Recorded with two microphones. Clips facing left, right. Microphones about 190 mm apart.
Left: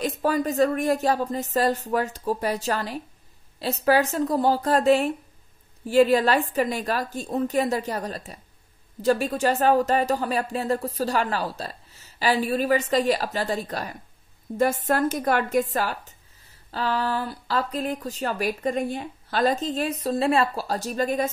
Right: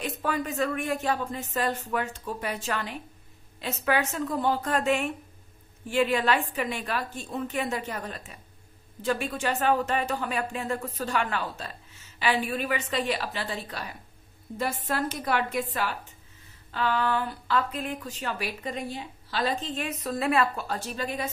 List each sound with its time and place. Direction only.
0.0 s a woman's voice: 35° left (ahead or behind)